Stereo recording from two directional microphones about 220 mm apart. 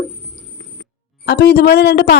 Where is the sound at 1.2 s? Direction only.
45° left (ahead or behind).